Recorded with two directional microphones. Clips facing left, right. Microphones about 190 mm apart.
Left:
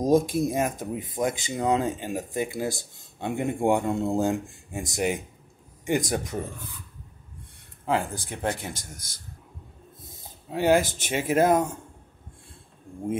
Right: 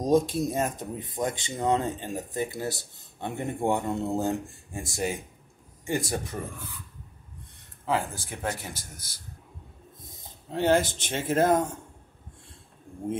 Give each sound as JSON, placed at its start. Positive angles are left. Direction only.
{"t": 0.0, "sound": "speech", "side_deg": 10}
{"t": 7.8, "sound": "speech", "side_deg": 15}
{"t": 10.5, "sound": "speech", "side_deg": 10}